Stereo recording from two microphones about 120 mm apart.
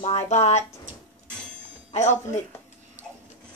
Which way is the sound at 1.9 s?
75° left (ahead or behind).